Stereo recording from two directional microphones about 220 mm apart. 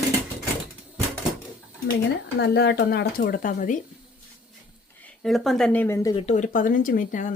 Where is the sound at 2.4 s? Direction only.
50° left (ahead or behind).